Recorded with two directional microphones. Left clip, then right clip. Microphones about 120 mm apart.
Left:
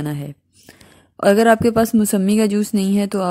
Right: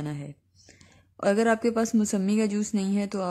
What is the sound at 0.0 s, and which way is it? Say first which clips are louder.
A woman's voice: left 9 dB; 40° left (ahead or behind).